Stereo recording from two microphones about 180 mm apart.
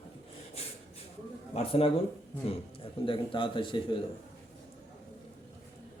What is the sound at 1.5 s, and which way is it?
A man's voice, 30° left (ahead or behind).